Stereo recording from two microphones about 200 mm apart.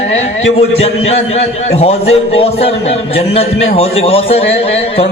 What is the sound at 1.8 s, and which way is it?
A man's voice, 30° left (ahead or behind).